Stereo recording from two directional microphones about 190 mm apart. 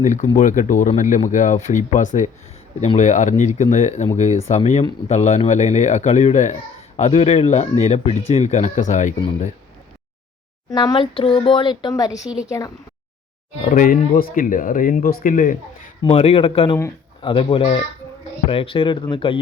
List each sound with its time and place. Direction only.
0.0 s speech: 40° left (ahead or behind)
10.7 s speech: 20° left (ahead or behind)
12.2 s a woman's voice: 5° right (ahead or behind)
12.5 s speech: 15° left (ahead or behind)
13.6 s speech: 45° left (ahead or behind)
16.0 s speech: 30° left (ahead or behind)